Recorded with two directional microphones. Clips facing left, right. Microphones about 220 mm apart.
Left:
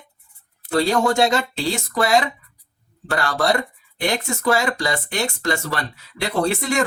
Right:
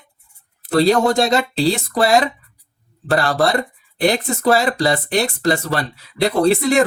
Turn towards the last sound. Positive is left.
turn(degrees=-35)  # may be behind; listen again after turning